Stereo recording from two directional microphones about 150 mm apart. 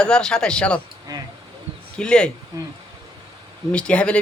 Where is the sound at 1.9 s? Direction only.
5° left (ahead or behind).